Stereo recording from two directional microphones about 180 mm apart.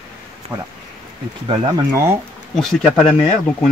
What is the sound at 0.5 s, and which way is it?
Speech, 10° right (ahead or behind).